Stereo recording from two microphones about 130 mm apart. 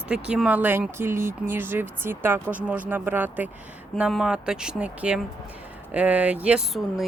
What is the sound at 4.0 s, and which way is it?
Speech, 5° right (ahead or behind).